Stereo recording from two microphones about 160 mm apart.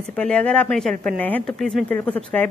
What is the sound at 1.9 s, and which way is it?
Speech, 10° left (ahead or behind).